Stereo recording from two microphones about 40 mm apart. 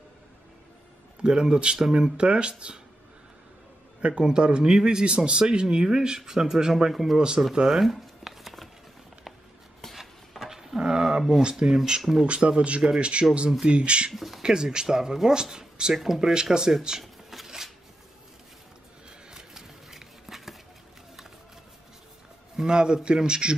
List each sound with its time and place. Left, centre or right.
1.2 s speech: centre
2.1 s speech: right
4.2 s speech: right; by 7.2 s centre
7.2 s speech: centre
7.6 s shuffling cards: centre
10.5 s roaring cats: centre
10.8 s speech: centre; by 14.1 s right
14.1 s speech: centre
14.4 s speech: centre
15.9 s speech: centre
16.2 s speech: centre
17.0 s shuffling cards: centre
19.0 s a sound: centre
22.6 s speech: centre